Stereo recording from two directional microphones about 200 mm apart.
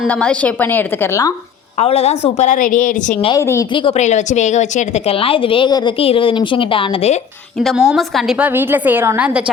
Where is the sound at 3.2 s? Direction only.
15° left (ahead or behind).